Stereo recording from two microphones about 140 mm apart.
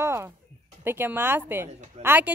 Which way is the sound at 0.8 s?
15° right (ahead or behind).